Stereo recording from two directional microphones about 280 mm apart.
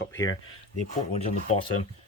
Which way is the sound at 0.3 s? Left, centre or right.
Left.